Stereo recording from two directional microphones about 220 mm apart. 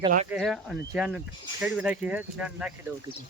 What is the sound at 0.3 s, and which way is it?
Speech, centre (ahead or behind).